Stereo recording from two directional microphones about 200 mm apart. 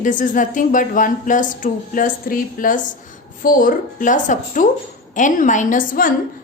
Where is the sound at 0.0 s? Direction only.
40° left (ahead or behind).